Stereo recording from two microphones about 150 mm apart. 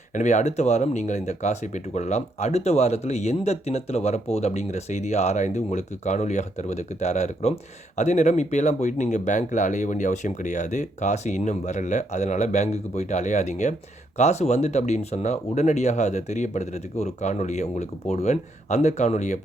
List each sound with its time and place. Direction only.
0.1 s speech: 55° left (ahead or behind)